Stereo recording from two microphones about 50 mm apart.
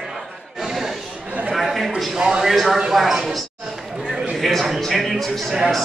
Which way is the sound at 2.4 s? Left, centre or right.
Centre.